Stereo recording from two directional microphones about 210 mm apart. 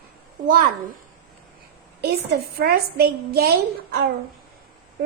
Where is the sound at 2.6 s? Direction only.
50° right (ahead or behind).